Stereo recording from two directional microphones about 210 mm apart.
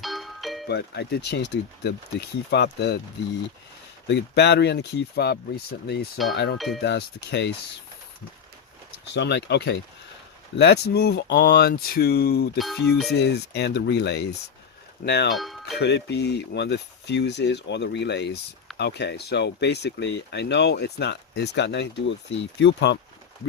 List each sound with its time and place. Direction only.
0.0 s music: centre (ahead or behind)
0.7 s speech: 55° left (ahead or behind)
4.0 s speech: 55° left (ahead or behind)
9.1 s speech: 55° left (ahead or behind)
12.5 s music: centre (ahead or behind)
13.1 s speech: 50° left (ahead or behind)
15.3 s speech: centre (ahead or behind)
15.8 s speech: 55° left (ahead or behind)